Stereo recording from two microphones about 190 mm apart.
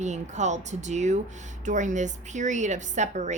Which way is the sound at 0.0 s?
40° right (ahead or behind).